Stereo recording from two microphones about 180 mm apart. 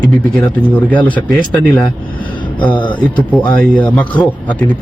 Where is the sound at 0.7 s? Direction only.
10° left (ahead or behind).